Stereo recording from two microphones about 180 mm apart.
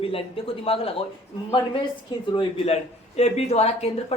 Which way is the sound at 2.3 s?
25° left (ahead or behind).